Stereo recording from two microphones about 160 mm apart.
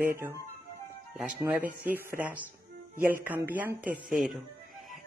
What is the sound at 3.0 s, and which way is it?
Speech, 10° right (ahead or behind).